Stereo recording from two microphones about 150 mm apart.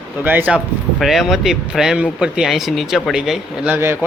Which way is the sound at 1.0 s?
Centre (ahead or behind).